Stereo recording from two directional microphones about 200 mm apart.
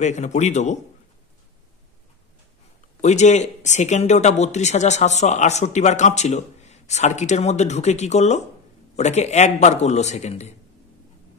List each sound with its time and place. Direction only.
0.0 s speech: 35° left (ahead or behind)
3.0 s speech: 35° left (ahead or behind)